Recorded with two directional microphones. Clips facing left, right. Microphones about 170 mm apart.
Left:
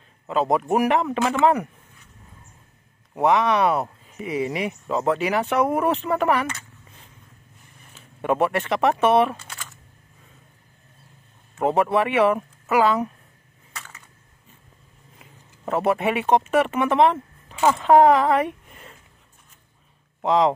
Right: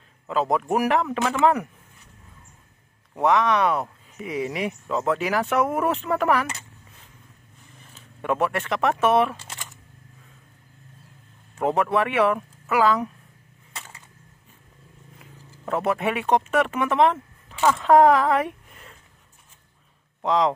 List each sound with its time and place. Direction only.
0.3 s speech: centre (ahead or behind)
3.3 s speech: centre (ahead or behind)
8.4 s speech: centre (ahead or behind)
11.6 s speech: 5° left (ahead or behind)
13.7 s a sound: 30° right (ahead or behind)
15.7 s a woman's voice: centre (ahead or behind)
20.2 s speech: 5° left (ahead or behind)